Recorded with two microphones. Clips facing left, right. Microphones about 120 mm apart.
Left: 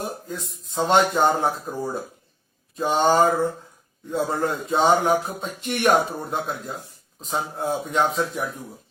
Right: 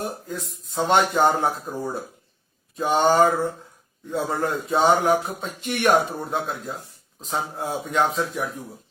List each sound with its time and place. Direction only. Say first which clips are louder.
0.3 s speech: right 1 dB; centre (ahead or behind)